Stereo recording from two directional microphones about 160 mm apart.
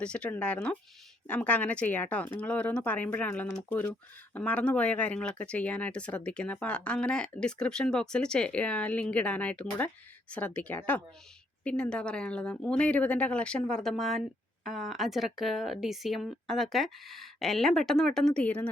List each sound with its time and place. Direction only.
0.0 s speech: 5° left (ahead or behind)